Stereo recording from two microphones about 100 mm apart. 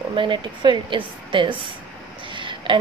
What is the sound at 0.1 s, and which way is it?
Speech, 55° right (ahead or behind).